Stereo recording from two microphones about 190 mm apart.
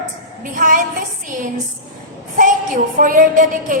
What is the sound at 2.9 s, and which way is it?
Speech, 45° right (ahead or behind).